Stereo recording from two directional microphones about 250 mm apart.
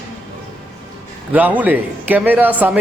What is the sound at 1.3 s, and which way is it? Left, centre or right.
A man's voice, centre.